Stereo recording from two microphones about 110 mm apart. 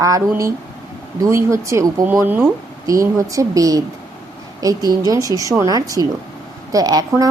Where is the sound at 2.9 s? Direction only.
30° right (ahead or behind).